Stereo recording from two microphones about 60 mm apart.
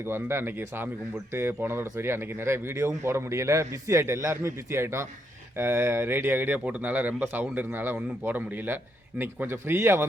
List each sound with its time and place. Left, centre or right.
0.0 s speech: right